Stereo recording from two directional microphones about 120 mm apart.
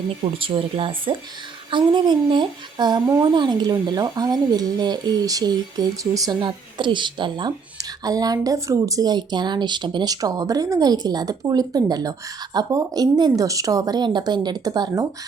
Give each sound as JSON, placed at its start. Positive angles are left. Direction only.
{"t": 0.3, "sound": "speech", "side_deg": -50}
{"t": 6.4, "sound": "speech", "side_deg": -40}